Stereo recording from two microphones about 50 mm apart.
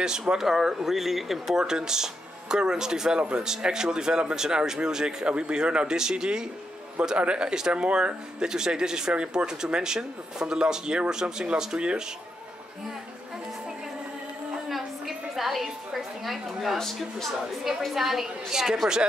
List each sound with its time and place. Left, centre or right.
0.0 s speech: centre
14.7 s a sound: centre
16.7 s a woman's voice: centre
17.8 s speech: centre